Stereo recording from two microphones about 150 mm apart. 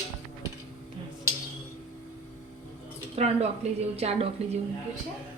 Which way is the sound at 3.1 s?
45° right (ahead or behind).